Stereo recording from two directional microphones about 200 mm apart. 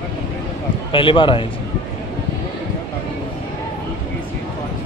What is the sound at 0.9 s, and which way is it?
Speech, 25° left (ahead or behind).